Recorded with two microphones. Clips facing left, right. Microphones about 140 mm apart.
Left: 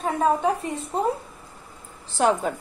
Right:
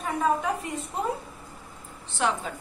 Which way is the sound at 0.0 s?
35° left (ahead or behind).